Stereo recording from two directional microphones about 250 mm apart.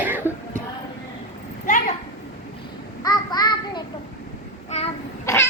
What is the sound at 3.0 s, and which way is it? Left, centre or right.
Child singing, centre.